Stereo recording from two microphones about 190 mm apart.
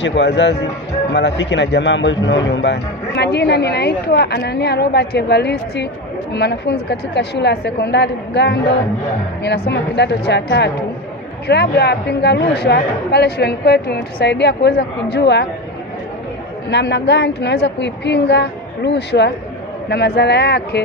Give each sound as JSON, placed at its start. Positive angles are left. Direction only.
{"t": 0.0, "sound": "a man's voice", "side_deg": 70}
{"t": 16.7, "sound": "a man's voice", "side_deg": 65}